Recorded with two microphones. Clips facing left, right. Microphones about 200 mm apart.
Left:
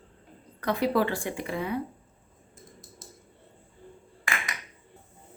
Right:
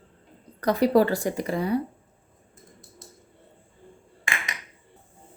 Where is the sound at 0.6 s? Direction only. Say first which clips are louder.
Right 6 dB; 40° right (ahead or behind).